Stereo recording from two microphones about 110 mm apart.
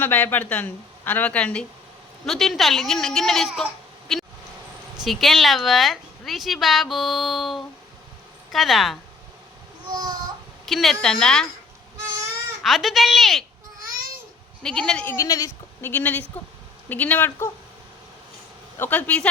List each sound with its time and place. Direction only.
0.0 s a woman's voice: 15° left (ahead or behind)
2.2 s a woman's voice: centre (ahead or behind)
4.1 s a sound: centre (ahead or behind)
5.0 s a woman's voice: centre (ahead or behind)
10.7 s a woman's voice: centre (ahead or behind)
12.6 s a woman's voice: centre (ahead or behind)
14.6 s a woman's voice: 5° left (ahead or behind)
15.0 s speech: 30° left (ahead or behind)
15.8 s a woman's voice: 15° left (ahead or behind)
18.8 s a woman's voice: 15° left (ahead or behind)